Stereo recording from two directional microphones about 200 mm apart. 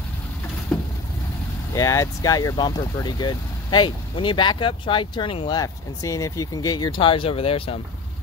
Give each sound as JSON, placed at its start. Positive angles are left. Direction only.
{"t": 0.7, "sound": "vehicle", "side_deg": 0}
{"t": 1.8, "sound": "speech", "side_deg": 15}